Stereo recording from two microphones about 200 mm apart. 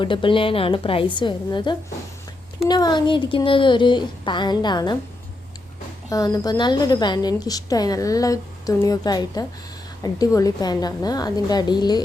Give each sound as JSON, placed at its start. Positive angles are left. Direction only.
{"t": 0.0, "sound": "a woman's voice", "side_deg": 25}
{"t": 6.1, "sound": "a woman's voice", "side_deg": 20}